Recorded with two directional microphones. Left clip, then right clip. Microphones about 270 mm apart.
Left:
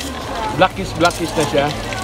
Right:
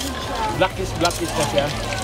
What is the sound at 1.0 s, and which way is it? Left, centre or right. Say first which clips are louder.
Speech: left 5 dB; centre.